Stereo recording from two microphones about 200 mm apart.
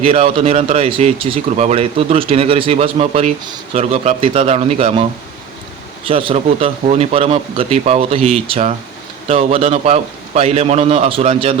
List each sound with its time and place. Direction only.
0.0 s speech: 30° right (ahead or behind)
6.1 s speech: 25° right (ahead or behind)